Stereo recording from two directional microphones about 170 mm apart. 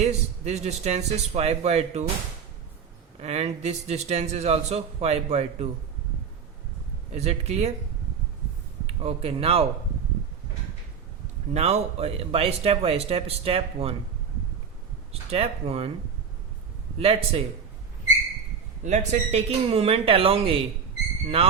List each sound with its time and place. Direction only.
0.0 s a man's voice: 40° right (ahead or behind)
3.2 s a man's voice: 40° right (ahead or behind)
7.1 s a man's voice: 40° right (ahead or behind)
8.9 s a man's voice: 35° right (ahead or behind)
11.5 s a man's voice: 40° right (ahead or behind)
15.1 s a man's voice: 35° right (ahead or behind)
17.0 s a man's voice: 35° right (ahead or behind)
18.8 s a man's voice: 45° right (ahead or behind)